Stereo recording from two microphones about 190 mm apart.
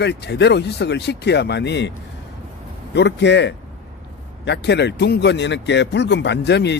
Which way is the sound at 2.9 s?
65° left (ahead or behind).